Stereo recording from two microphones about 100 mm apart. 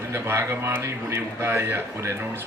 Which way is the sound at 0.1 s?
25° right (ahead or behind).